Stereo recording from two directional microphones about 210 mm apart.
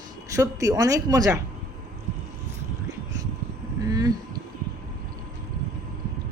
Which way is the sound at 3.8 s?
20° right (ahead or behind).